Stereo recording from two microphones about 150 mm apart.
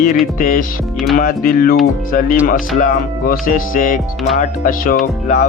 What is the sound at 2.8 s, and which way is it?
Music, 70° left (ahead or behind).